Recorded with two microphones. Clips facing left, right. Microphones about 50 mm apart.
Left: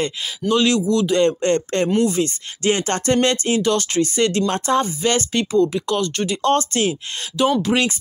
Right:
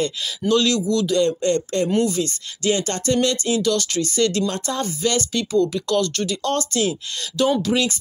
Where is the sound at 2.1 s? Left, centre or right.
Left.